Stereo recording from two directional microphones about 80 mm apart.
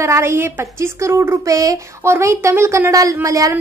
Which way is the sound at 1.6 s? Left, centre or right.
Right.